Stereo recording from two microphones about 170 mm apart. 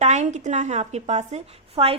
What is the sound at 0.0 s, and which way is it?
A woman's voice, 40° right (ahead or behind).